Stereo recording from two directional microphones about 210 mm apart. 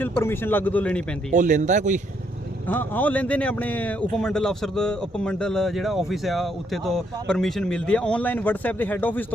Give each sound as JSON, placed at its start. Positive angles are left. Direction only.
{"t": 0.0, "sound": "speech", "side_deg": 10}
{"t": 1.3, "sound": "speech", "side_deg": -35}
{"t": 2.6, "sound": "speech", "side_deg": 10}